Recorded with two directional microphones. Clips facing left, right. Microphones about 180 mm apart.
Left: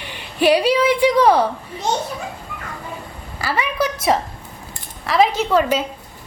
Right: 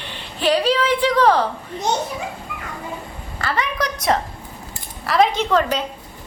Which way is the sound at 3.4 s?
10° left (ahead or behind).